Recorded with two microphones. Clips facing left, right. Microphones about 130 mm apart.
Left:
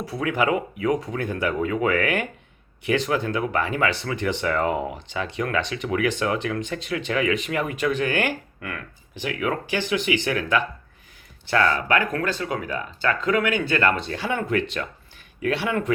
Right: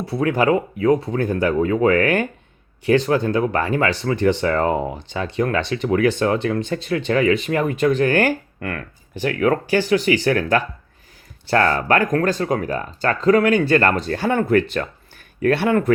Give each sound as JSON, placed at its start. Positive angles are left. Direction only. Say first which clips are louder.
{"t": 0.1, "sound": "speech", "louder": "right 5 dB", "side_deg": -35}